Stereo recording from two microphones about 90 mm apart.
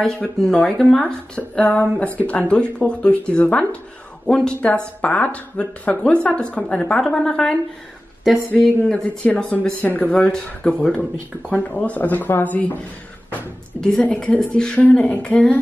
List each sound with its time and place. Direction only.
0.4 s speech: 5° left (ahead or behind)
14.0 s speech: 15° left (ahead or behind)